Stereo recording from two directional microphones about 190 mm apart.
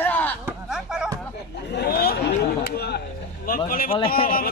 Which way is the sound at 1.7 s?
55° left (ahead or behind).